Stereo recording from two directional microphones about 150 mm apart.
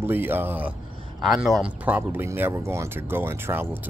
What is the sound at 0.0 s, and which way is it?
Speech, 15° right (ahead or behind).